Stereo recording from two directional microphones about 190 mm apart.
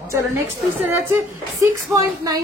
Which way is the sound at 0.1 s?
15° right (ahead or behind).